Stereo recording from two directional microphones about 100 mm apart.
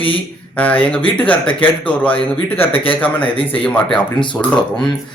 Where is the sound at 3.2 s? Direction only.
65° left (ahead or behind).